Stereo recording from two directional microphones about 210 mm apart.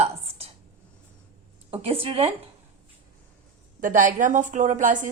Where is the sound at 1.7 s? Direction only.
25° right (ahead or behind).